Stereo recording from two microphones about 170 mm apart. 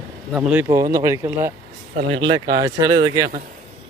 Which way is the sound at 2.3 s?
25° right (ahead or behind).